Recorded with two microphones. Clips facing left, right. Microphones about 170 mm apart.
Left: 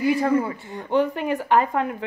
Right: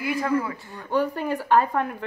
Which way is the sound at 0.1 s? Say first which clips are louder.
Left 4 dB; 25° left (ahead or behind).